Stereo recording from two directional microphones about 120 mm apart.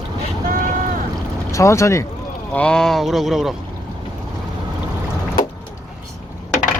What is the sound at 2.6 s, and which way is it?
Speech, 5° left (ahead or behind).